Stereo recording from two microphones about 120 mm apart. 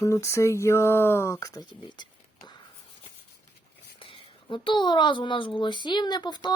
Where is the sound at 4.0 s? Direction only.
45° left (ahead or behind).